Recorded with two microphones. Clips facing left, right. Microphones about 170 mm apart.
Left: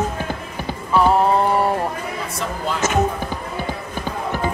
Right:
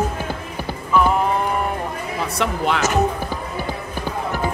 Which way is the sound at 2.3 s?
70° right (ahead or behind).